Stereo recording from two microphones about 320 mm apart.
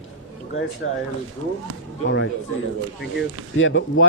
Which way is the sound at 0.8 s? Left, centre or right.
Left.